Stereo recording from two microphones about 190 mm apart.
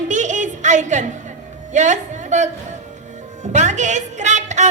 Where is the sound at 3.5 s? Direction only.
40° right (ahead or behind).